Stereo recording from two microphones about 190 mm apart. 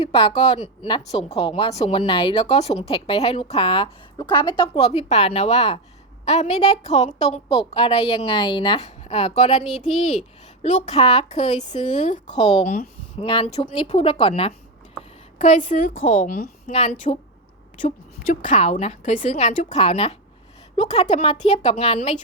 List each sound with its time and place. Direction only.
0.0 s a woman's voice: 25° left (ahead or behind)
15.4 s a woman's voice: 40° left (ahead or behind)
18.4 s a woman's voice: 40° left (ahead or behind)